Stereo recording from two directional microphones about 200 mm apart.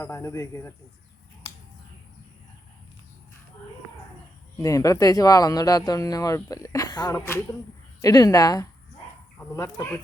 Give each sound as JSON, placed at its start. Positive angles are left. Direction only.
{"t": 0.0, "sound": "speech", "side_deg": 15}
{"t": 4.5, "sound": "a woman's voice", "side_deg": 15}